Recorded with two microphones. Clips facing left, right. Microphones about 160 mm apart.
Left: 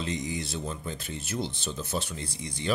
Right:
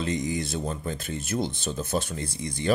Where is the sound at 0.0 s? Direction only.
50° right (ahead or behind).